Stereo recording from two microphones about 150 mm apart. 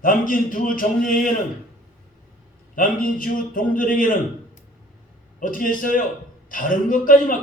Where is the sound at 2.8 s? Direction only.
65° left (ahead or behind).